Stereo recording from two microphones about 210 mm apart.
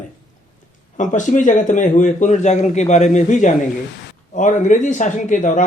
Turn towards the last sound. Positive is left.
turn(degrees=35)  # may be behind; listen again after turning